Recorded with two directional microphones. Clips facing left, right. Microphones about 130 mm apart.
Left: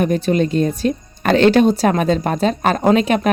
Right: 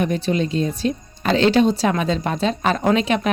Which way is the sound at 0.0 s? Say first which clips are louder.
Left 4 dB; 45° left (ahead or behind).